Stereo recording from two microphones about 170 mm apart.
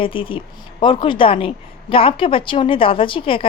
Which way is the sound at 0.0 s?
30° left (ahead or behind).